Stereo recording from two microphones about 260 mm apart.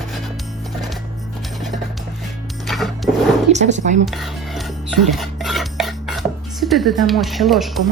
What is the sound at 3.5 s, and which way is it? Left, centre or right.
Speech, right.